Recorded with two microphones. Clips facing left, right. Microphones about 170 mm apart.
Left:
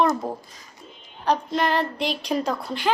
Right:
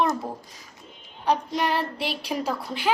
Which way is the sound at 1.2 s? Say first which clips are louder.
Left 2 dB; 10° right (ahead or behind).